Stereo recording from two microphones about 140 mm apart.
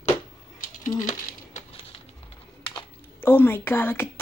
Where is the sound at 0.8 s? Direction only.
65° left (ahead or behind).